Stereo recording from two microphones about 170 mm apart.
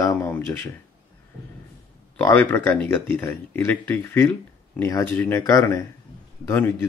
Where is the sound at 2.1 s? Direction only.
15° left (ahead or behind).